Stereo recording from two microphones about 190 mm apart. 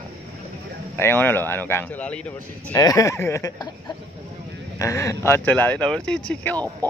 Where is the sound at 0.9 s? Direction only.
10° left (ahead or behind).